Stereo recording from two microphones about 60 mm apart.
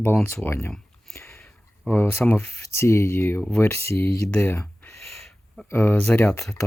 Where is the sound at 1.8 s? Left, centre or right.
Left.